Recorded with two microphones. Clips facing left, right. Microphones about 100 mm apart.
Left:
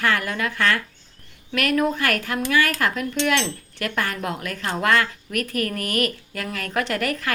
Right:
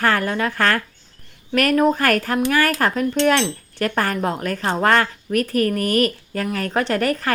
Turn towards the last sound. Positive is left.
turn(degrees=-35)  # may be behind; listen again after turning